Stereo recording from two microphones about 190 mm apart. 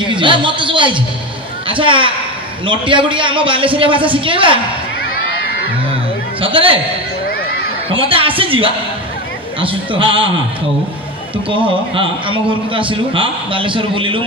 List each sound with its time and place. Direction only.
0.0 s a man's voice: 25° right (ahead or behind)
6.4 s a man's voice: 30° right (ahead or behind)
7.9 s a man's voice: 30° right (ahead or behind)
11.4 s a man's voice: 25° right (ahead or behind)